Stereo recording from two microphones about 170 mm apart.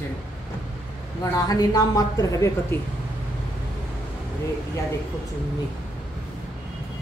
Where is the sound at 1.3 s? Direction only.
20° left (ahead or behind).